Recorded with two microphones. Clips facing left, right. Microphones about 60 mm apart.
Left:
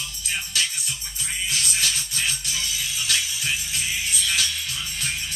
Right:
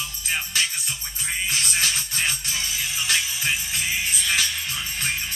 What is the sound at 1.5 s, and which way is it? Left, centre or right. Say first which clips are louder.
Music: right 1 dB; right.